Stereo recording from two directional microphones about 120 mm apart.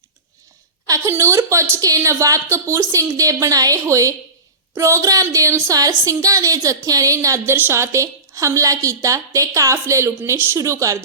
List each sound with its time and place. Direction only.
0.9 s speech: 25° right (ahead or behind)